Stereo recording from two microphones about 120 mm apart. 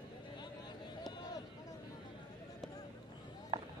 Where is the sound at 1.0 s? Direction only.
35° left (ahead or behind).